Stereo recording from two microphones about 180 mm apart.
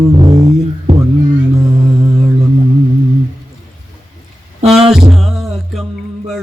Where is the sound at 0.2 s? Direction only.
25° right (ahead or behind).